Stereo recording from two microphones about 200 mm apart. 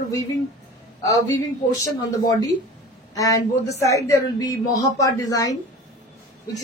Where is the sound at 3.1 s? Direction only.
15° left (ahead or behind).